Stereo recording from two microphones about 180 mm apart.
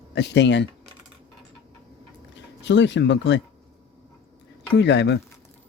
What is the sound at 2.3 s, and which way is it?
Speech, 80° left.